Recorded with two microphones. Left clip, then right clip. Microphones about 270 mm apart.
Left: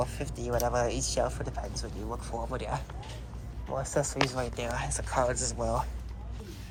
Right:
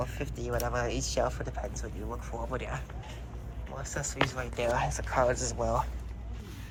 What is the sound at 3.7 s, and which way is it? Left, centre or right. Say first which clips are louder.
Speech: left 7 dB; left.